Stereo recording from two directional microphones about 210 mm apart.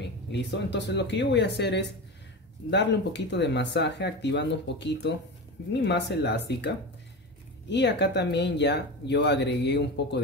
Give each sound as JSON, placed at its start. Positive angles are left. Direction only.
{"t": 0.0, "sound": "speech", "side_deg": 55}
{"t": 7.7, "sound": "speech", "side_deg": 55}